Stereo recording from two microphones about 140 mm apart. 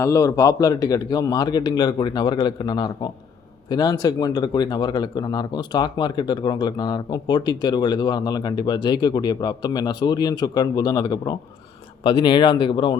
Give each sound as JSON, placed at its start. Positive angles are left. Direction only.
{"t": 0.0, "sound": "speech", "side_deg": 20}